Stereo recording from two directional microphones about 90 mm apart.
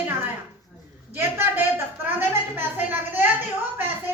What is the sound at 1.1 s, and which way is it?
A woman's voice, 25° right (ahead or behind).